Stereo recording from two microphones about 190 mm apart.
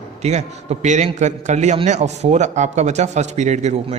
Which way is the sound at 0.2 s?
35° right (ahead or behind).